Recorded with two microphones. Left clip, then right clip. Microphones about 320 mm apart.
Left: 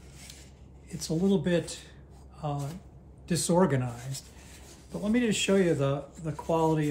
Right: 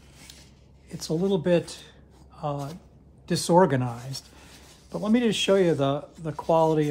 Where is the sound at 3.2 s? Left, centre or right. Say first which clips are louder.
Right 6 dB; centre.